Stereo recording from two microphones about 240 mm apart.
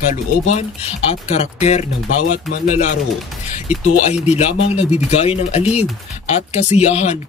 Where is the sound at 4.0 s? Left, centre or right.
Left.